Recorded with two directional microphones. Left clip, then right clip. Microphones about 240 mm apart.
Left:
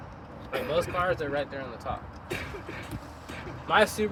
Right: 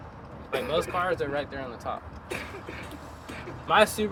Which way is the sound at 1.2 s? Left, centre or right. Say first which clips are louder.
Right 1 dB; right.